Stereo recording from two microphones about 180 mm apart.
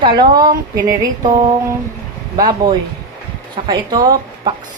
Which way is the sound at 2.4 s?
20° right (ahead or behind).